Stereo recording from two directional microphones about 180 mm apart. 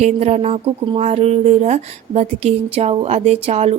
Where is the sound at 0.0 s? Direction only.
40° right (ahead or behind).